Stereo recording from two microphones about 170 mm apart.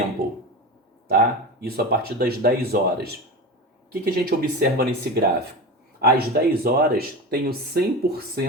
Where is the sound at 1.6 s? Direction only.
65° right (ahead or behind).